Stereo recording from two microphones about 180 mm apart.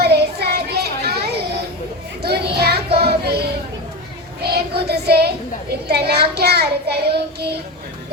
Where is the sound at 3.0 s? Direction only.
65° right (ahead or behind).